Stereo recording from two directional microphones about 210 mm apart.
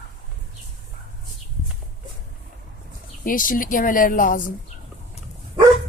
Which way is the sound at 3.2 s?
40° left (ahead or behind).